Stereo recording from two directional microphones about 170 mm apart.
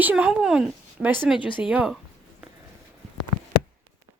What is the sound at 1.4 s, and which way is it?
Speech, 30° left (ahead or behind).